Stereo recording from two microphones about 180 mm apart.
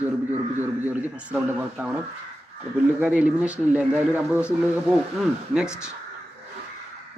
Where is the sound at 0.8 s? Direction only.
10° right (ahead or behind).